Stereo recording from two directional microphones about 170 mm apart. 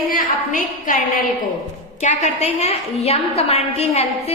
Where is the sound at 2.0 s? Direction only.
45° left (ahead or behind).